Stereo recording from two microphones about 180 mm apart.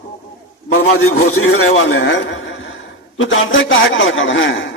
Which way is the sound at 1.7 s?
90° left.